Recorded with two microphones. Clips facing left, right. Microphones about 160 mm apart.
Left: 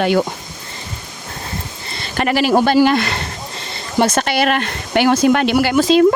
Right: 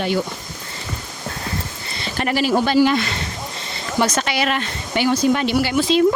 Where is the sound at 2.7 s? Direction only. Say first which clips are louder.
Left 3 dB; 70° left (ahead or behind).